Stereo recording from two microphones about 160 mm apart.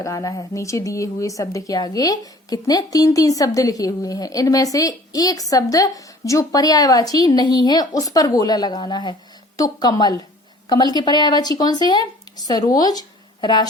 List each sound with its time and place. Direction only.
0.0 s a woman's voice: 20° left (ahead or behind)